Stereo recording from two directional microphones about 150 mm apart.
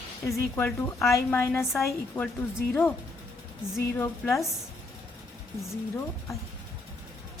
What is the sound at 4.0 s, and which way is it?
Speech, 20° left (ahead or behind).